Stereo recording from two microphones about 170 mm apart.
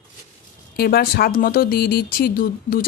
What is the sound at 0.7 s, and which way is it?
Speech, 65° left (ahead or behind).